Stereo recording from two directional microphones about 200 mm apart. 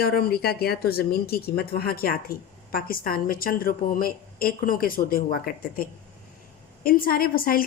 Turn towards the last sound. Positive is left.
turn(degrees=45)  # may be behind; listen again after turning